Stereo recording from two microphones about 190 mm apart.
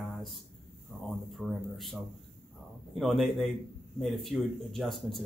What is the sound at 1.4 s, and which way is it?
A man's voice, centre (ahead or behind).